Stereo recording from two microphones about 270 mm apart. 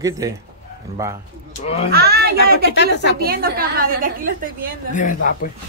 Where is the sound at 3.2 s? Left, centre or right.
Right.